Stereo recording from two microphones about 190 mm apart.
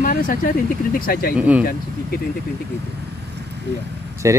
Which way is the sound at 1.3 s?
5° right (ahead or behind).